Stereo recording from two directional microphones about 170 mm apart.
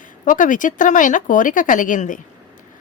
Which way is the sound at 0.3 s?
50° left (ahead or behind).